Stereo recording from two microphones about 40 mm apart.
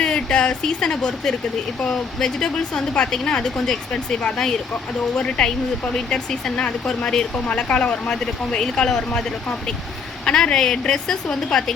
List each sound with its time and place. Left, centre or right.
0.0 s a woman's voice: left
7.3 s a woman's voice: left; by 9.2 s centre
10.2 s a woman's voice: left